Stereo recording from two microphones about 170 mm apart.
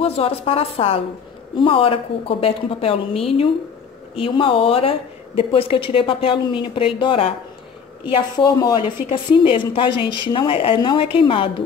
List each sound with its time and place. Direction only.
0.0 s a woman's voice: 35° left (ahead or behind)